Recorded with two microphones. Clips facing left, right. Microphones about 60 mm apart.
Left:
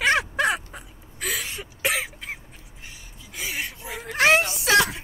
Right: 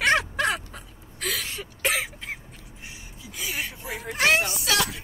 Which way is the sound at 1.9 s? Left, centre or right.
Centre.